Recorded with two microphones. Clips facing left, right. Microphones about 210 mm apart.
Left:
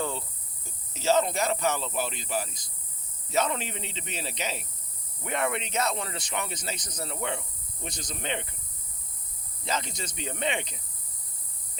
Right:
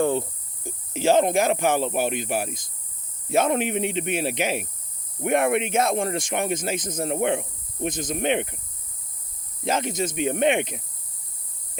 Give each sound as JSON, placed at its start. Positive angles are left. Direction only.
{"t": 0.6, "sound": "a sound", "side_deg": -55}
{"t": 1.4, "sound": "speech", "side_deg": -55}
{"t": 9.6, "sound": "speech", "side_deg": -50}